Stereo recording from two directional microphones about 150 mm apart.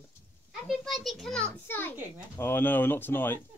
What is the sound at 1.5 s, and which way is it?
A child's voice, 15° left (ahead or behind).